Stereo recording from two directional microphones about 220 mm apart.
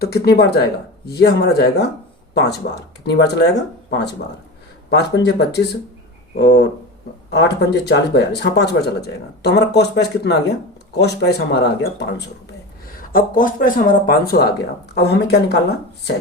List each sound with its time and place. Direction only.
0.0 s speech: 45° left (ahead or behind)
13.0 s speech: 40° left (ahead or behind)